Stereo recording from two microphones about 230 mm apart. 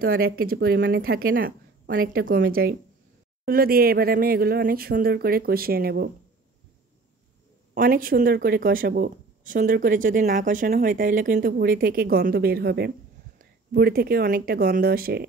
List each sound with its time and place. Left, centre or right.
0.0 s speech: right
7.7 s speech: right